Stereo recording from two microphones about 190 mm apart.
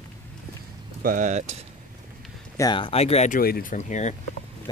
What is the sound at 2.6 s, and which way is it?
Speech, 25° left (ahead or behind).